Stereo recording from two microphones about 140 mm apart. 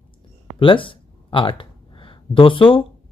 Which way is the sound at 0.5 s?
40° left (ahead or behind).